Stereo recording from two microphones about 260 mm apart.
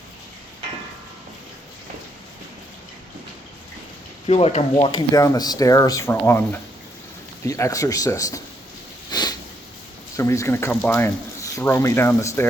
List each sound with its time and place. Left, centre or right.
4.3 s speech: left
9.0 s a sound: centre
10.2 s speech: centre